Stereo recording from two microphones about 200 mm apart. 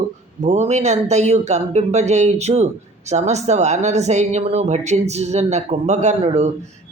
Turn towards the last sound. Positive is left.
turn(degrees=-30)  # may be behind; listen again after turning